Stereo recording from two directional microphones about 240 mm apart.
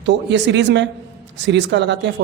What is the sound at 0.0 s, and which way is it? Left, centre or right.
Speech, right.